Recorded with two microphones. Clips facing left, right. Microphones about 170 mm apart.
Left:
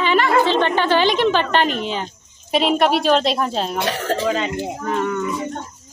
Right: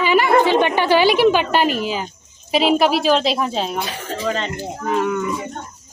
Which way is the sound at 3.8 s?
75° left (ahead or behind).